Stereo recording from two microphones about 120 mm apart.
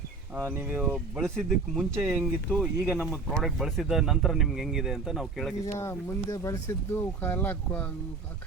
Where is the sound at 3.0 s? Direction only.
Centre (ahead or behind).